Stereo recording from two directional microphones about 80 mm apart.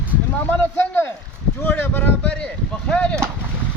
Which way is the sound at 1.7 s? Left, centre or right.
Left.